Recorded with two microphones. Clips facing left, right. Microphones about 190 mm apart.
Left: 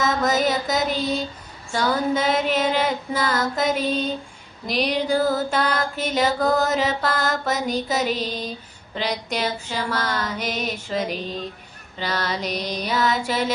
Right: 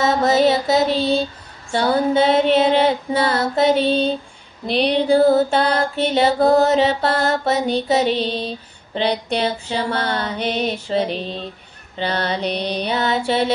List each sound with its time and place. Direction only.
0.0 s mantra: 30° right (ahead or behind)
1.7 s female singing: 30° right (ahead or behind)
4.6 s music: 30° right (ahead or behind)